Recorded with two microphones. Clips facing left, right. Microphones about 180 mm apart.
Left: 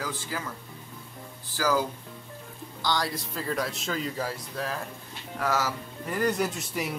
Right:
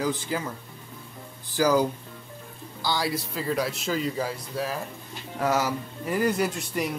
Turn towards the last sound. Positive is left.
turn(degrees=0)  # may be behind; listen again after turning